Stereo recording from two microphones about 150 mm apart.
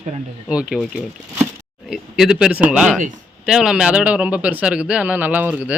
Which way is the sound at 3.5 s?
5° right (ahead or behind).